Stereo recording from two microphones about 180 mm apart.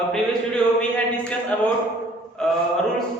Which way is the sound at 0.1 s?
5° left (ahead or behind).